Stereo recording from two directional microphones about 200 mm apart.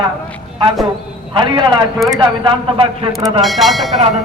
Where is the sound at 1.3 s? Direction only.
25° right (ahead or behind).